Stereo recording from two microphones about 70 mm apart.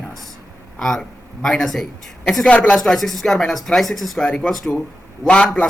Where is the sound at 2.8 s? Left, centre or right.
Centre.